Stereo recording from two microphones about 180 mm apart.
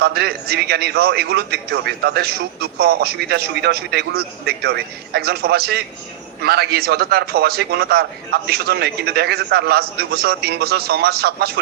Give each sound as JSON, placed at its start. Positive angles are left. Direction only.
{"t": 0.0, "sound": "a man's voice", "side_deg": -60}